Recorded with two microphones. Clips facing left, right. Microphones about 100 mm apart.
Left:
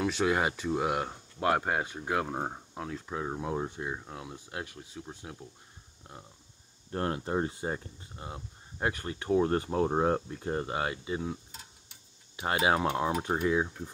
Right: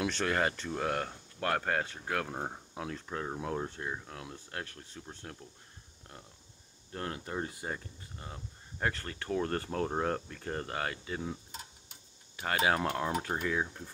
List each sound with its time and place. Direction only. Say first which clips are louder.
0.0 s speech: left 3 dB; 10° left (ahead or behind)
2.7 s speech: left 2 dB; centre (ahead or behind)
6.9 s speech: left 7 dB; 30° left (ahead or behind)
12.4 s speech: left 3 dB; 20° left (ahead or behind)